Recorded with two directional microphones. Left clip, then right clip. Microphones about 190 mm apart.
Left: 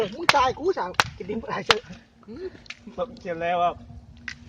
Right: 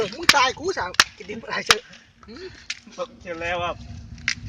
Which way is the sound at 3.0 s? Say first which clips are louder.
Left 3 dB; 55° left (ahead or behind).